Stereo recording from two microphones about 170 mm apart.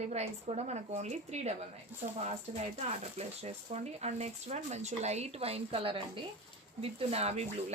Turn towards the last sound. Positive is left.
turn(degrees=-40)  # may be behind; listen again after turning